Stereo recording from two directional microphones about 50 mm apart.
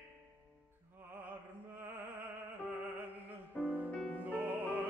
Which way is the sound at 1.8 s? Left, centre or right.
Right.